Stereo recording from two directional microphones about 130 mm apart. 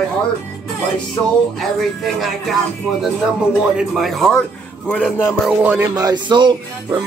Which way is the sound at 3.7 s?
Centre (ahead or behind).